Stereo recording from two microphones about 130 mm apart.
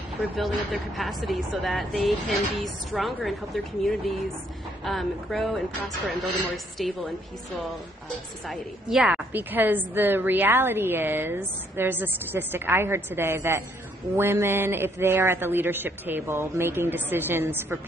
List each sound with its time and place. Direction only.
0.4 s a woman's voice: centre (ahead or behind)
8.5 s a woman's voice: 5° right (ahead or behind)